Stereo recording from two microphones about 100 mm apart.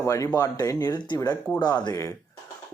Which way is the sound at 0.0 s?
30° left (ahead or behind).